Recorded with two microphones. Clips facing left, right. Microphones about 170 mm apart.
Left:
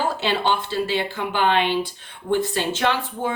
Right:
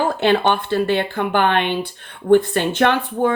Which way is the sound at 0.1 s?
55° right (ahead or behind).